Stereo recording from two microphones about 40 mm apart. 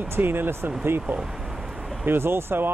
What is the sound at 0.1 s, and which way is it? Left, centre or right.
Speech, right.